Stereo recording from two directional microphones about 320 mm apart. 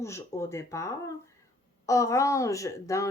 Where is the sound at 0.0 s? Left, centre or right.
Centre.